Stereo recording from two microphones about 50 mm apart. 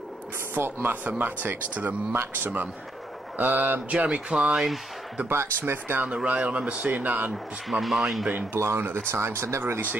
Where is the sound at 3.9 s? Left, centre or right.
Right.